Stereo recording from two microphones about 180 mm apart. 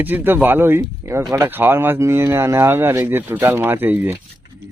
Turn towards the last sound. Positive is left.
turn(degrees=-10)  # may be behind; listen again after turning